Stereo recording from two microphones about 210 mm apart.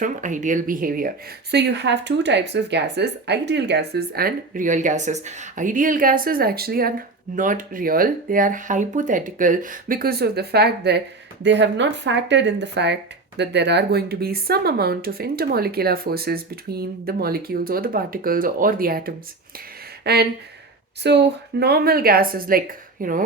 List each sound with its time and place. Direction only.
0.0 s speech: 35° right (ahead or behind)